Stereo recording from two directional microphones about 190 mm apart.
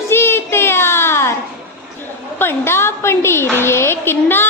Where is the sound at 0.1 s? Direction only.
10° left (ahead or behind).